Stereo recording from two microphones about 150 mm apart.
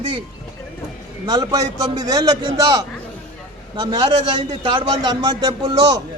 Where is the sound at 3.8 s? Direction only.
30° right (ahead or behind).